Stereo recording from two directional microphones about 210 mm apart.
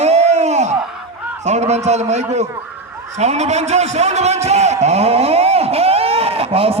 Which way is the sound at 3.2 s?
30° right (ahead or behind).